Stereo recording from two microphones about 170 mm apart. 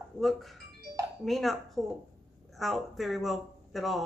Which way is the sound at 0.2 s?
Centre (ahead or behind).